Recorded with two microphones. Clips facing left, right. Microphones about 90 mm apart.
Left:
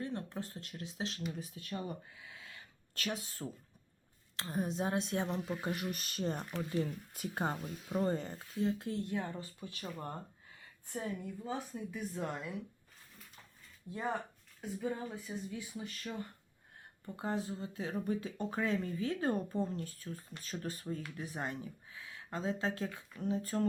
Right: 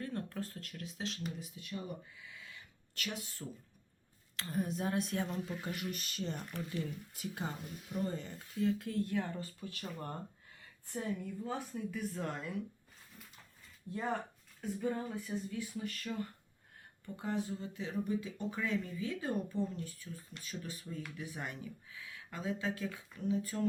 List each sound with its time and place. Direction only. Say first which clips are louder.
0.0 s speech: even; 20° left (ahead or behind)
3.0 s speech: left 3 dB; 35° left (ahead or behind); by 12.5 s 10° left (ahead or behind)
13.9 s speech: even; 10° left (ahead or behind)
14.6 s a sound: right 2 dB; 5° left (ahead or behind)
15.3 s speech: right 2 dB; 15° left (ahead or behind)
17.2 s speech: even; 30° left (ahead or behind)